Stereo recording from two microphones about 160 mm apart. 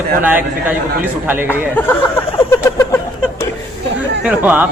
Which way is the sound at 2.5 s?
15° left (ahead or behind).